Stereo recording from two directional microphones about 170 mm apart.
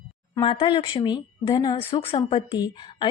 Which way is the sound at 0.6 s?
25° left (ahead or behind).